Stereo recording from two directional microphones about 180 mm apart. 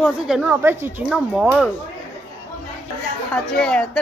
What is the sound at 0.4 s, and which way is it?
Speech, 10° right (ahead or behind).